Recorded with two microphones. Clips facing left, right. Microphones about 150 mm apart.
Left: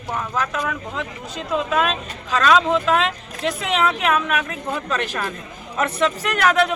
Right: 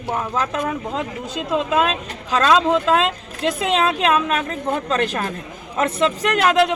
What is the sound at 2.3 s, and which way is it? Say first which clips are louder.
Speech: right 1 dB; 25° right (ahead or behind).